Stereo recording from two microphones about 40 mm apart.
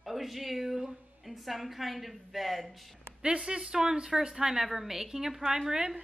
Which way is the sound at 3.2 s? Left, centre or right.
Right.